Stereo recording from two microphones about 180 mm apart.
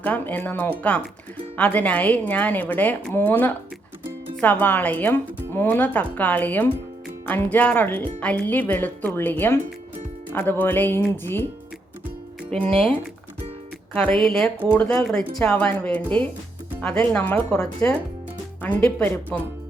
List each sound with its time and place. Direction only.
0.0 s speech: 10° left (ahead or behind)
12.5 s speech: 5° left (ahead or behind)
14.3 s speech: centre (ahead or behind)